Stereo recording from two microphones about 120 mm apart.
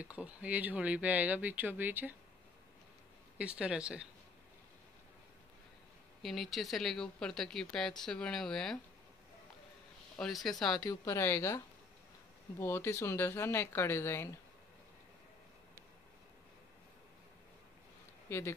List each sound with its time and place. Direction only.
0.0 s speech: 10° right (ahead or behind)
3.3 s speech: 10° right (ahead or behind)
6.2 s speech: centre (ahead or behind)
10.1 s speech: centre (ahead or behind)
10.8 s speech: 30° left (ahead or behind)
11.1 s speech: 20° left (ahead or behind)
18.3 s speech: 20° left (ahead or behind)